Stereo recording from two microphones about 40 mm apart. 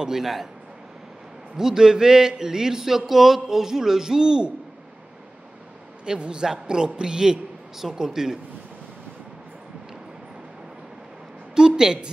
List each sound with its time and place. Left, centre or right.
0.0 s a man's voice: centre
1.6 s a man's voice: centre
6.0 s a man's voice: right
11.5 s a sound: centre